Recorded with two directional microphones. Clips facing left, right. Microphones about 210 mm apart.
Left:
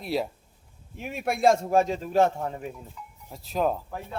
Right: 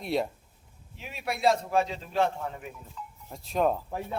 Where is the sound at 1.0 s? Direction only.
50° left (ahead or behind).